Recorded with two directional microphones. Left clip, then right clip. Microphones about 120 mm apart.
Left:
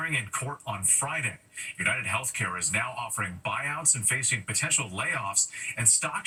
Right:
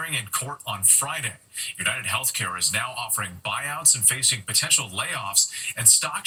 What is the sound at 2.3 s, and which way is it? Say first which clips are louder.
Speech: right 4 dB; 20° right (ahead or behind).